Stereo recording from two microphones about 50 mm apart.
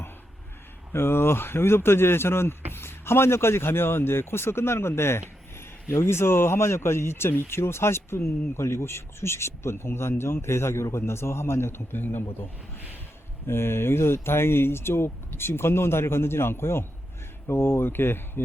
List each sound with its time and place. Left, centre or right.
0.9 s speech: left
13.5 s speech: left